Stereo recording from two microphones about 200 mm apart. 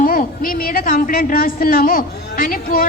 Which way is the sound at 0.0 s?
45° left (ahead or behind).